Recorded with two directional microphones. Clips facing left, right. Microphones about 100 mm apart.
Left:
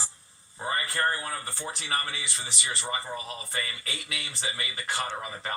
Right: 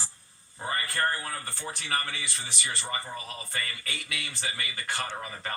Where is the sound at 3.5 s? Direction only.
20° left (ahead or behind).